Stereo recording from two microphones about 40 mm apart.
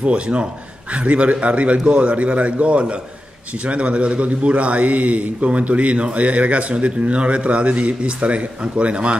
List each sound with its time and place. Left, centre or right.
0.0 s a man's voice: right